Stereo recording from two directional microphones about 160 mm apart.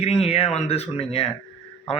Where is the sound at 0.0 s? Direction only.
40° left (ahead or behind).